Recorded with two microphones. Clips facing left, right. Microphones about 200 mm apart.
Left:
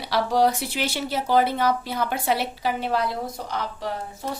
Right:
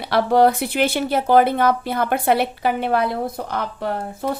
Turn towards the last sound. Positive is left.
turn(degrees=-55)  # may be behind; listen again after turning